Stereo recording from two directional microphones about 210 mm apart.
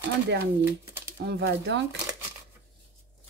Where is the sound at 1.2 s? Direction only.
50° right (ahead or behind).